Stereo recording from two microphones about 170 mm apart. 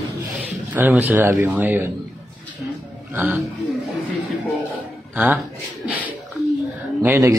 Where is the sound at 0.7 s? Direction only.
10° right (ahead or behind).